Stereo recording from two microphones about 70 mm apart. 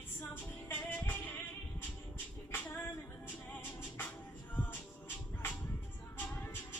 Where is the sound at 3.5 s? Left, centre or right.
Left.